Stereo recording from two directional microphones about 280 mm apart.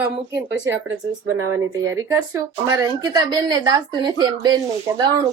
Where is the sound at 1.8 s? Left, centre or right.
Centre.